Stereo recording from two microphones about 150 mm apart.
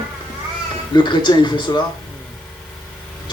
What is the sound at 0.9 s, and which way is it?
Speech, 30° left (ahead or behind).